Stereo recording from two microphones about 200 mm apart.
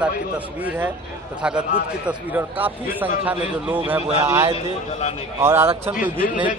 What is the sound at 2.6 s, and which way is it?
A man's voice, 10° right (ahead or behind).